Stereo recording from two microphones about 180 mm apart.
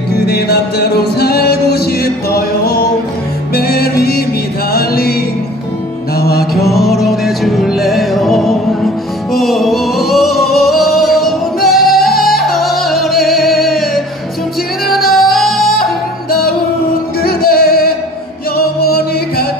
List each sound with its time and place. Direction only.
0.1 s music: 60° left (ahead or behind)
6.1 s music: 60° left (ahead or behind)
6.7 s music: centre (ahead or behind)
15.7 s music: 55° left (ahead or behind)